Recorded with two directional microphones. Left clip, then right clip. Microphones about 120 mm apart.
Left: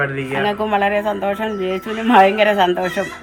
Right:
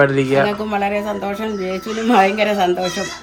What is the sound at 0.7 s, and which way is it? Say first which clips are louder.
Speech: left 3 dB; 10° right (ahead or behind).